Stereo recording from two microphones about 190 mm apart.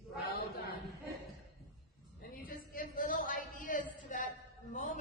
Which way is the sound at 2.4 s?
50° left (ahead or behind).